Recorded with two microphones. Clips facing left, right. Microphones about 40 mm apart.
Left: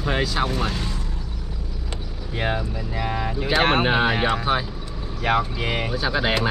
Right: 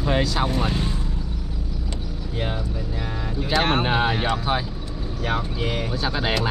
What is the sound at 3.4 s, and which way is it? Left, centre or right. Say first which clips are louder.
Speech: left 2 dB; left.